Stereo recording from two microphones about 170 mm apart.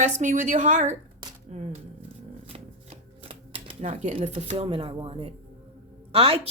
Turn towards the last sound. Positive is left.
turn(degrees=-35)  # may be behind; listen again after turning